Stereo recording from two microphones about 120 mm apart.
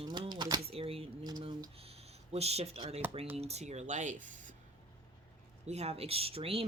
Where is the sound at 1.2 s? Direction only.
40° right (ahead or behind).